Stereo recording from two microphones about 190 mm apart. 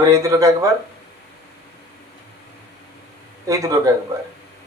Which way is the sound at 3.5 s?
15° right (ahead or behind).